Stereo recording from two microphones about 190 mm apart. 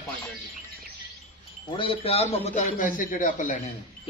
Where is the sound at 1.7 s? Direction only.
30° left (ahead or behind).